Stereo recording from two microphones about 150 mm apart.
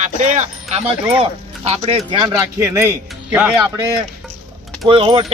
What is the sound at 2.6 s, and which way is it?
Speech, 15° right (ahead or behind).